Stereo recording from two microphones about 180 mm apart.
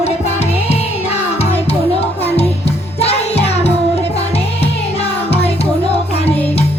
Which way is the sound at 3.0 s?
35° left (ahead or behind).